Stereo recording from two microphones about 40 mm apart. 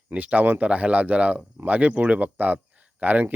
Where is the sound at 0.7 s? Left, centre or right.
Right.